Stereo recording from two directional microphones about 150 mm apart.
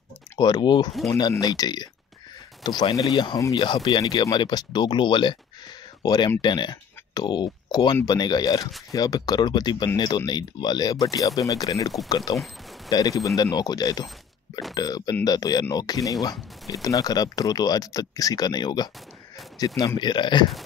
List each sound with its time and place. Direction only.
0.4 s speech: 30° left (ahead or behind)